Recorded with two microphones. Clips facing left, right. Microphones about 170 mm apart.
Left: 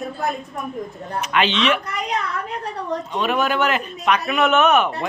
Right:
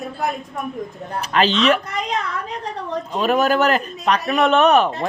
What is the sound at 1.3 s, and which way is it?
Speech, 40° right (ahead or behind).